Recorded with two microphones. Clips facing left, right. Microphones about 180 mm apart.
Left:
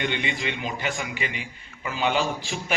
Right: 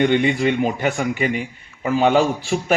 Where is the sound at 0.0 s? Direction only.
45° right (ahead or behind).